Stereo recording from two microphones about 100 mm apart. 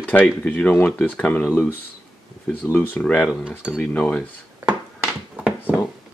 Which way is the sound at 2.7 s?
15° left (ahead or behind).